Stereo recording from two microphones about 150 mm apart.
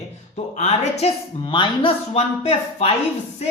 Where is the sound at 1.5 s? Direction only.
35° left (ahead or behind).